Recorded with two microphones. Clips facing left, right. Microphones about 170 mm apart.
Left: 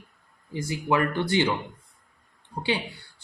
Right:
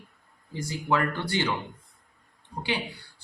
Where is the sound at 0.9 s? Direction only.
20° left (ahead or behind).